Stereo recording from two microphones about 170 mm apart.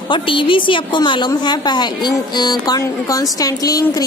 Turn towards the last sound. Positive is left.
turn(degrees=20)  # may be behind; listen again after turning